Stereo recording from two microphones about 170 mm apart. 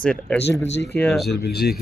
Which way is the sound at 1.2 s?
70° left (ahead or behind).